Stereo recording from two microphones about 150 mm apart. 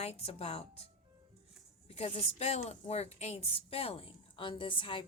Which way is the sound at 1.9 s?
40° left (ahead or behind).